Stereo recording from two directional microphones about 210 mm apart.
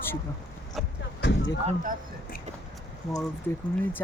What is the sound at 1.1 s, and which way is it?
Speech, 55° left (ahead or behind).